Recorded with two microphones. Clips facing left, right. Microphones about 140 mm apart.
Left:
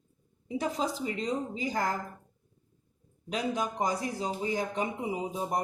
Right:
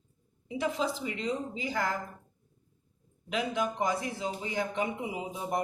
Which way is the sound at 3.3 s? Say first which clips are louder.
Even; 40° left (ahead or behind).